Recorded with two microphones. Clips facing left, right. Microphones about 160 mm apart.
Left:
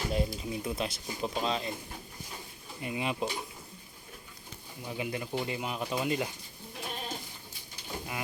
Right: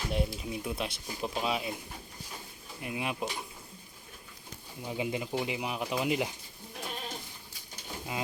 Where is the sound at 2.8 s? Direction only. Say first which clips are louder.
Left 2 dB; centre (ahead or behind).